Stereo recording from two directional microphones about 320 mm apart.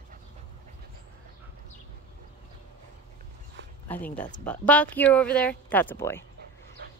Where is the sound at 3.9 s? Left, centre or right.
Centre.